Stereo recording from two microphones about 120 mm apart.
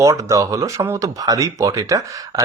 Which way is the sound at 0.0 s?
25° right (ahead or behind).